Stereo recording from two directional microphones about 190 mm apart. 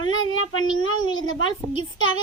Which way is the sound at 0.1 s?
90° left.